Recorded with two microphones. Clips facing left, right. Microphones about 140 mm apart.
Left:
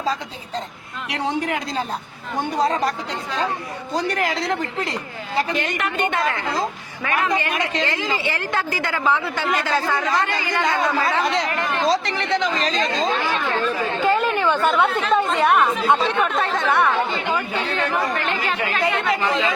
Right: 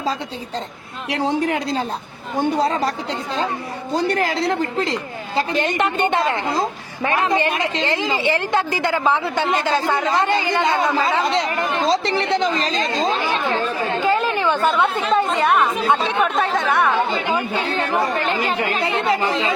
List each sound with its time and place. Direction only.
1.1 s a woman's voice: 30° right (ahead or behind)
14.1 s chatter: centre (ahead or behind)
14.7 s speech: centre (ahead or behind)
17.7 s a woman's voice: 30° right (ahead or behind)